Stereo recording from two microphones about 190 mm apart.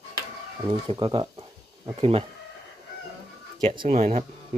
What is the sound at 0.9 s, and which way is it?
Speech, 25° right (ahead or behind).